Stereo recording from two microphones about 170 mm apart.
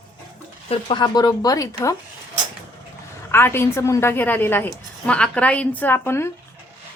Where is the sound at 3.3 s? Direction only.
15° left (ahead or behind).